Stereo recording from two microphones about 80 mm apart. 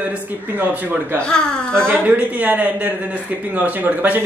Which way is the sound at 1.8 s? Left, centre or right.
Right.